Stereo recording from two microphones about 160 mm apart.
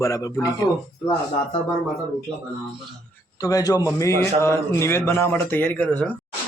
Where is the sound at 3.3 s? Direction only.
20° left (ahead or behind).